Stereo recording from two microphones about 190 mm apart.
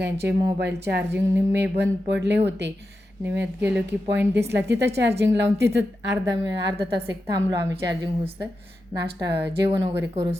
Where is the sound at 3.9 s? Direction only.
65° right (ahead or behind).